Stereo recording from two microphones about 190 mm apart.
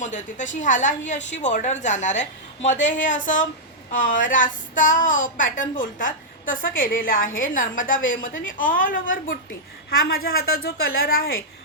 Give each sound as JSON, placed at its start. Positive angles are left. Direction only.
{"t": 0.0, "sound": "a woman's voice", "side_deg": 40}